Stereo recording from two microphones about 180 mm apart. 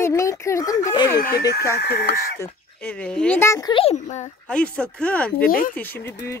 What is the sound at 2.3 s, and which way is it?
Speech, 10° left (ahead or behind).